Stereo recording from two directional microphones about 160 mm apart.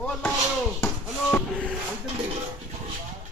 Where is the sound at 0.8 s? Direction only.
10° left (ahead or behind).